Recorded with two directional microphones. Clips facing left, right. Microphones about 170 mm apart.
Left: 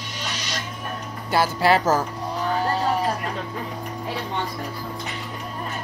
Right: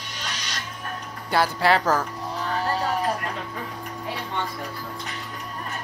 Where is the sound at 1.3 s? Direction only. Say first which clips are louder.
Left 2 dB; 5° left (ahead or behind).